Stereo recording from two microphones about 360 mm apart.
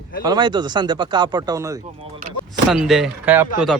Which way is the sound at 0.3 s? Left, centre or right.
Centre.